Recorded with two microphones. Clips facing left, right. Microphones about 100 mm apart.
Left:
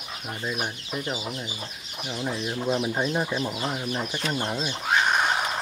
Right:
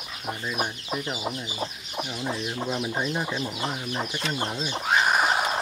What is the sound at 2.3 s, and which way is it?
Speech, centre (ahead or behind).